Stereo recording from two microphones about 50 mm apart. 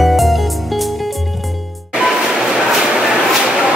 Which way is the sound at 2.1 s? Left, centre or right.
Centre.